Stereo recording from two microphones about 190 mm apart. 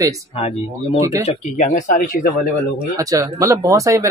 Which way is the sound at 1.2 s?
40° left (ahead or behind).